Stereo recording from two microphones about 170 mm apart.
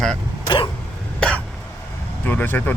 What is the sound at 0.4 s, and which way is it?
Vehicle, 30° left (ahead or behind).